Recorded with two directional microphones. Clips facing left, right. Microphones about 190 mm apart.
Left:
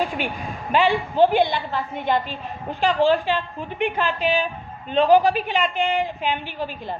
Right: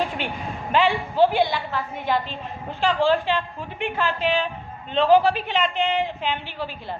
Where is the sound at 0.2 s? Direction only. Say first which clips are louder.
Left 1 dB; 10° left (ahead or behind).